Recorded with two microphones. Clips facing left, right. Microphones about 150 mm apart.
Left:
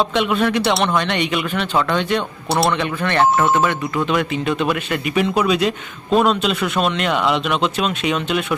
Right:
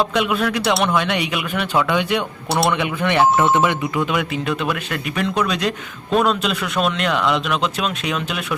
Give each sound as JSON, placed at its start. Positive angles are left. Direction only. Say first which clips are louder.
{"t": 0.0, "sound": "speech", "louder": "left 1 dB", "side_deg": 0}
{"t": 3.9, "sound": "speech", "louder": "left 2 dB", "side_deg": -5}